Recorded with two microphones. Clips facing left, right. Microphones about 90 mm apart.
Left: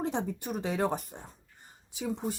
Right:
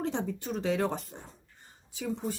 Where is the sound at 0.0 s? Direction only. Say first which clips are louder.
Even; 15° left (ahead or behind).